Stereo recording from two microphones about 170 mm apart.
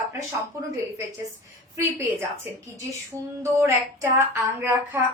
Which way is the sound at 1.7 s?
15° right (ahead or behind).